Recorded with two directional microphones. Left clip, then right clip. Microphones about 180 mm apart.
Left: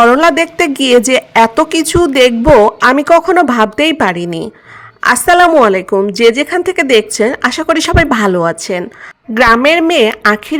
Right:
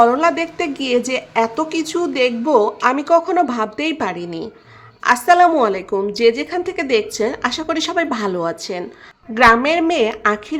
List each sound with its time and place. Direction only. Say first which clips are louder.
0.0 s a woman's voice: left 6 dB; 45° left (ahead or behind)